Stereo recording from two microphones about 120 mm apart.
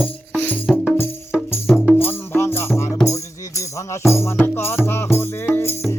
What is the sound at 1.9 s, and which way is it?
Music, 15° left (ahead or behind).